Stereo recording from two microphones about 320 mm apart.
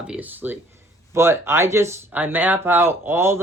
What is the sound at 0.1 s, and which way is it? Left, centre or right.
Speech, centre.